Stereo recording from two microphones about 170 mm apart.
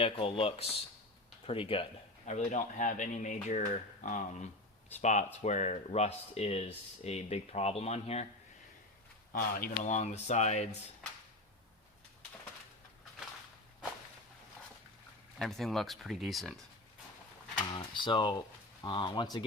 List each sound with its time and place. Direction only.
0.0 s speech: 35° left (ahead or behind)
2.2 s speech: 45° left (ahead or behind)
9.3 s speech: 60° left (ahead or behind); by 10.7 s 40° left (ahead or behind)
15.4 s speech: centre (ahead or behind)
17.6 s speech: 30° left (ahead or behind)